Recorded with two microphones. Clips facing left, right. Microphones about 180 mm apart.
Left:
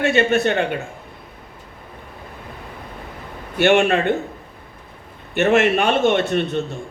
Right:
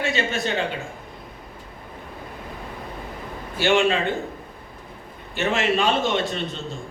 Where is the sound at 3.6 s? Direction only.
60° left (ahead or behind).